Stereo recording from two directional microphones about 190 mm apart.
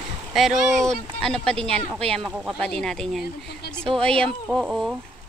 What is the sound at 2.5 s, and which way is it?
Speech, 5° left (ahead or behind).